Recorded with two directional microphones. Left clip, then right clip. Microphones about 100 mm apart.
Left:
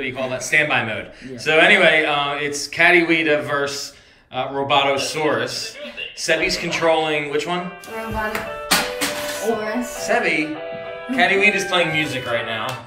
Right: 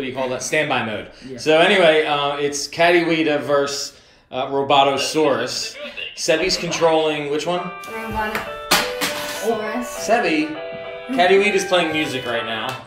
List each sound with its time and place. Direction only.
0.0 s speech: 25° right (ahead or behind)
9.4 s speech: 5° right (ahead or behind)
10.0 s speech: 25° right (ahead or behind)